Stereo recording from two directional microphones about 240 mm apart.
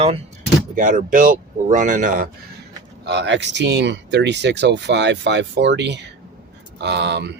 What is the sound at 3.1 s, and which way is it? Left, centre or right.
Speech, right.